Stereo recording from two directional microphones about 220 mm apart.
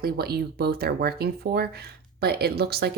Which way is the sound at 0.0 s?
45° right (ahead or behind).